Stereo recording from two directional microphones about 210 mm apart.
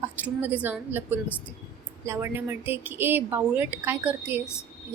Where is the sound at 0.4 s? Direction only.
5° right (ahead or behind).